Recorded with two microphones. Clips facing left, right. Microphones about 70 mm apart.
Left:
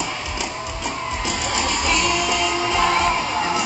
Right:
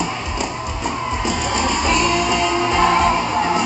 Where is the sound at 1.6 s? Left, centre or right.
Right.